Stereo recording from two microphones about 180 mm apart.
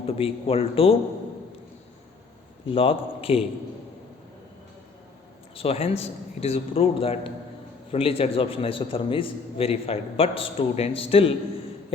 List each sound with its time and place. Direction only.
0.0 s a man's voice: 30° left (ahead or behind)
2.6 s a man's voice: 30° left (ahead or behind)
5.5 s a man's voice: 35° left (ahead or behind)